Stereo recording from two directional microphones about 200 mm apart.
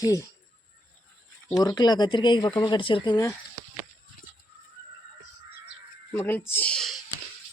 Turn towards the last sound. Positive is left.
turn(degrees=5)  # may be behind; listen again after turning